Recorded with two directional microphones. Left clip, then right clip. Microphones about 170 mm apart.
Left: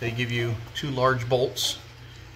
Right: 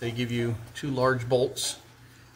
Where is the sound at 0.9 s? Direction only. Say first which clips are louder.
Left 2 dB; 40° right (ahead or behind).